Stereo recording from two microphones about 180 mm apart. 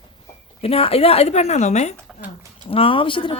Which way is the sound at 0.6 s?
35° left (ahead or behind).